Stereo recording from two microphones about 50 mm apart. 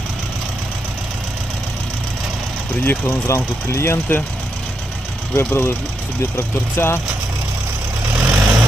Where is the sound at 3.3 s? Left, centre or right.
Left.